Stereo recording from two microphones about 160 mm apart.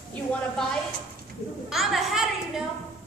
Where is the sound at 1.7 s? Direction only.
Centre (ahead or behind).